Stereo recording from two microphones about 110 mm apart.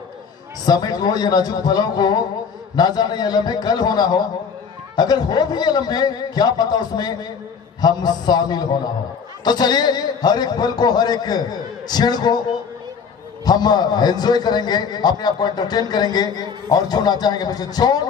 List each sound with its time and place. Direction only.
0.7 s a man's voice: 35° left (ahead or behind)
13.4 s a man's voice: 40° left (ahead or behind)